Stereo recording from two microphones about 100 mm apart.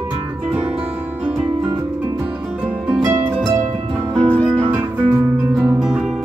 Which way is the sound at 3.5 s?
20° right (ahead or behind).